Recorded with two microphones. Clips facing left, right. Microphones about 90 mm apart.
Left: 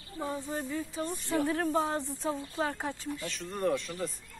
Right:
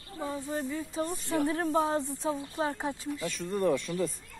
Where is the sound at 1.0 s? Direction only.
30° right (ahead or behind).